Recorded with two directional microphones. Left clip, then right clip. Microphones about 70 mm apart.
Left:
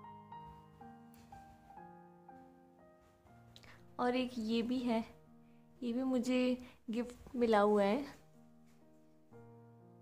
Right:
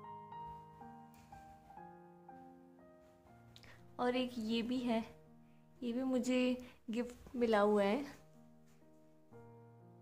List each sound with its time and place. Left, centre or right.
0.0 s music: centre
3.5 s a woman's voice: left
7.7 s speech: centre